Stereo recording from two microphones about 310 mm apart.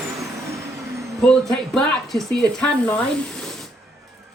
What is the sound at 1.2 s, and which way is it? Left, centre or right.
Speech, centre.